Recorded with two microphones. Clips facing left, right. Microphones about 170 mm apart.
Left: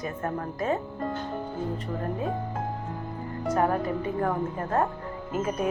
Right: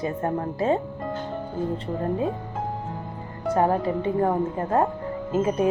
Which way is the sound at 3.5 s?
30° right (ahead or behind).